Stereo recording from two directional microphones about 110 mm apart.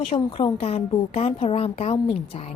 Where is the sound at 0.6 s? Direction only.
65° left (ahead or behind).